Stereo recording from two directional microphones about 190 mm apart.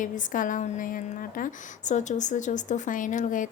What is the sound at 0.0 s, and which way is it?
A woman's voice, 45° left (ahead or behind).